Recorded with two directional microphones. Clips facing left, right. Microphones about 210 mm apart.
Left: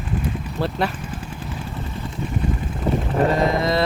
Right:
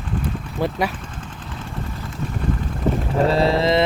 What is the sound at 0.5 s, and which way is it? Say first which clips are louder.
Speech: right 1 dB; 15° right (ahead or behind).